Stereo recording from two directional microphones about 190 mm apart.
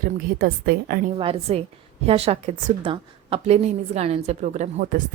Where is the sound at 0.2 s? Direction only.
50° right (ahead or behind).